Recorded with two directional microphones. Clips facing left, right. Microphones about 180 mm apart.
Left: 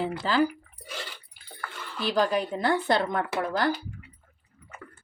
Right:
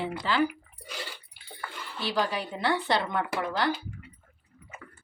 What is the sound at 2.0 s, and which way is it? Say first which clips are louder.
A woman's voice: left 5 dB; 45° left (ahead or behind).